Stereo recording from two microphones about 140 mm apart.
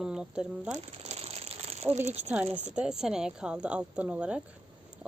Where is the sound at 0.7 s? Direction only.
50° right (ahead or behind).